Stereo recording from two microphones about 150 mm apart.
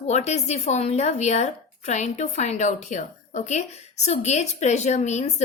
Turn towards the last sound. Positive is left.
turn(degrees=50)  # may be behind; listen again after turning